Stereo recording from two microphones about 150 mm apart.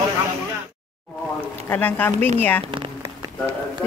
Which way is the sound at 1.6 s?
10° left (ahead or behind).